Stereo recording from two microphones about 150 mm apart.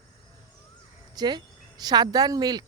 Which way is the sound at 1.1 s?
30° right (ahead or behind).